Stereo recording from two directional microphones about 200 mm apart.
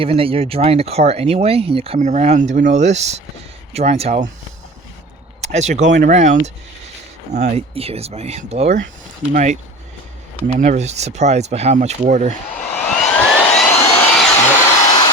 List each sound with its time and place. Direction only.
0.0 s speech: 30° right (ahead or behind)
5.4 s speech: 35° right (ahead or behind)
10.6 s speech: 35° right (ahead or behind)
12.7 s jet engine: 5° left (ahead or behind)
14.0 s hair dryer: 10° left (ahead or behind)